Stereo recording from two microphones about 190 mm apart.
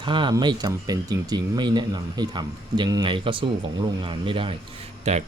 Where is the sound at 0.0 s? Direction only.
25° right (ahead or behind).